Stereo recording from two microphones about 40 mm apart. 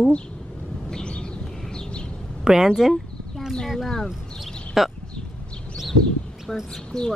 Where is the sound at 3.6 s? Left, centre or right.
Centre.